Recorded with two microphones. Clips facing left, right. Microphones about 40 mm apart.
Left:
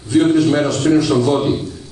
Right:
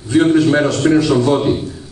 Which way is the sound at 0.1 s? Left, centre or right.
Right.